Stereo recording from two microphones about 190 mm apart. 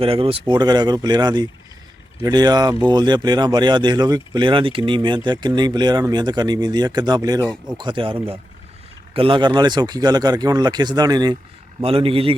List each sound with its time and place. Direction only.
0.0 s speech: 30° right (ahead or behind)